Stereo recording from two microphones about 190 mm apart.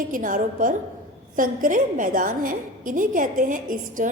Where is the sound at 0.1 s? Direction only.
45° right (ahead or behind).